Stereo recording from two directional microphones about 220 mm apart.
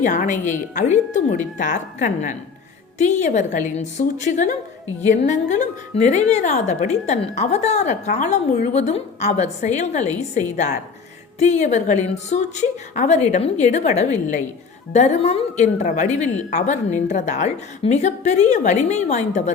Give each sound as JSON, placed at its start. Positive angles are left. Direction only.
{"t": 0.0, "sound": "a woman's voice", "side_deg": 35}